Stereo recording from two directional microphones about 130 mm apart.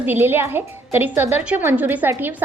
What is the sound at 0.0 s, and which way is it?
A woman's voice, 15° right (ahead or behind).